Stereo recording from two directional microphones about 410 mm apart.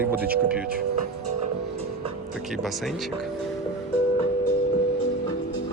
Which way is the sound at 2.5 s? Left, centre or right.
Centre.